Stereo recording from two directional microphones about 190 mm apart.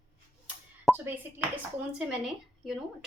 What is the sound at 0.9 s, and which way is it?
A woman's voice, 10° right (ahead or behind).